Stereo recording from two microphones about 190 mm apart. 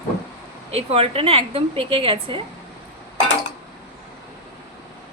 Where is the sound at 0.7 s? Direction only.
30° right (ahead or behind).